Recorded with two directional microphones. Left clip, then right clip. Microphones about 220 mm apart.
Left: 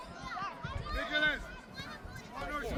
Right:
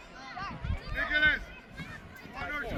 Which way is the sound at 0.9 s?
55° left (ahead or behind).